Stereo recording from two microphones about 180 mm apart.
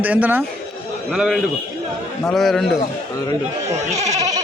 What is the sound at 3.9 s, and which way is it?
Speech, 40° right (ahead or behind).